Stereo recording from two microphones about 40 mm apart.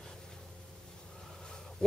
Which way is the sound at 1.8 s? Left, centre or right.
Centre.